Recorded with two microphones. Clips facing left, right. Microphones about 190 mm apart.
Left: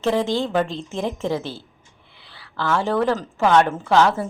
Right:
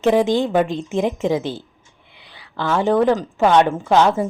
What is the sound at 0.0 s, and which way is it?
A woman's voice, 15° right (ahead or behind).